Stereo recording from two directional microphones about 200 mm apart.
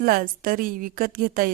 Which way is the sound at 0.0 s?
45° right (ahead or behind).